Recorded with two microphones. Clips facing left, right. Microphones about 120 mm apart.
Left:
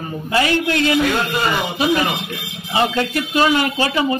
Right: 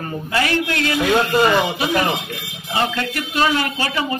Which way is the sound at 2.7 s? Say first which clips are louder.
Left 3 dB; 15° left (ahead or behind).